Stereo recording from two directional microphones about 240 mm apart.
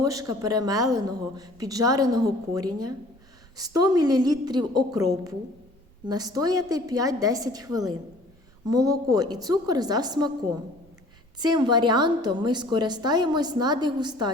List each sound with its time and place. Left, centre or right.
0.0 s a woman's voice: centre
6.1 s a woman's voice: centre
11.3 s a woman's voice: centre